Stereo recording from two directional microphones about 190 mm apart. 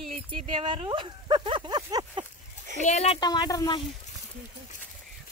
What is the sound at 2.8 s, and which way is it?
Speech, 35° left (ahead or behind).